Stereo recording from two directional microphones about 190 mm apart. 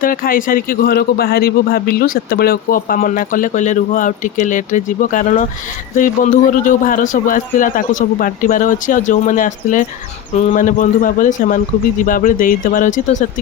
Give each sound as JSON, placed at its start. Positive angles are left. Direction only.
{"t": 0.0, "sound": "a man's voice", "side_deg": 50}